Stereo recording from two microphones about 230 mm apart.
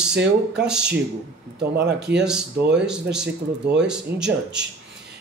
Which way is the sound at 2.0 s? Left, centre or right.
Right.